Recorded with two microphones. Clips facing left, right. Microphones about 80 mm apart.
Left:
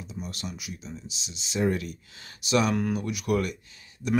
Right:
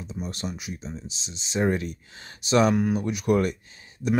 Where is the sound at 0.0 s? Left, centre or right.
Right.